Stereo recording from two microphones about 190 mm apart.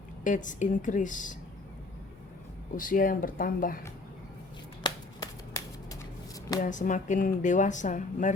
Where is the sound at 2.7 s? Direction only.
45° left (ahead or behind).